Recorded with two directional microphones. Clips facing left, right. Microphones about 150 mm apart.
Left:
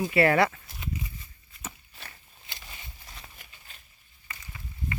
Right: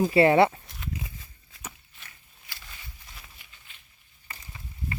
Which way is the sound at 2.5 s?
20° left (ahead or behind).